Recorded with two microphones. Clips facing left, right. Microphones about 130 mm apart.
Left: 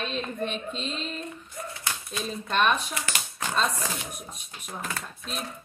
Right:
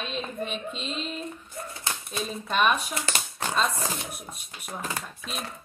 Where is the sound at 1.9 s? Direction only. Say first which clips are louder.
Right 2 dB; 25° right (ahead or behind).